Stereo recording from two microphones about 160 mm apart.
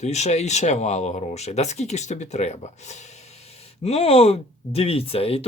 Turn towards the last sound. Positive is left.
turn(degrees=40)  # may be behind; listen again after turning